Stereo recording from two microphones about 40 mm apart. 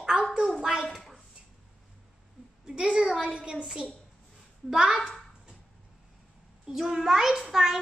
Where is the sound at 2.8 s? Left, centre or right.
Right.